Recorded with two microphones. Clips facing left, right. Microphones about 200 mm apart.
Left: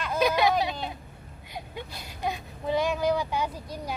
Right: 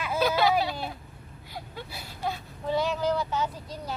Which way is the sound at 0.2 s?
15° left (ahead or behind).